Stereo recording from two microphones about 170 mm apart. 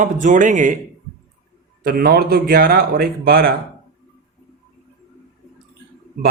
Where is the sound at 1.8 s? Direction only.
65° right (ahead or behind).